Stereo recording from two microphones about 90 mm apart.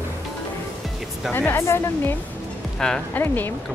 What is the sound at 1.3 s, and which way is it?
Speech, 25° left (ahead or behind).